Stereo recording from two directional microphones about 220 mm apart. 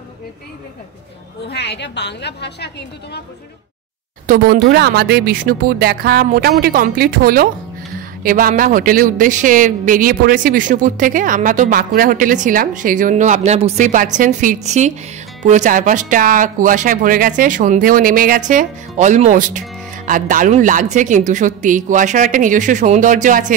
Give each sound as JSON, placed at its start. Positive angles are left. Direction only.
{"t": 1.5, "sound": "a woman's voice", "side_deg": 50}
{"t": 4.3, "sound": "a woman's voice", "side_deg": -40}